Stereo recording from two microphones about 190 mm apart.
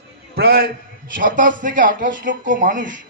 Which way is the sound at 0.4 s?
50° right (ahead or behind).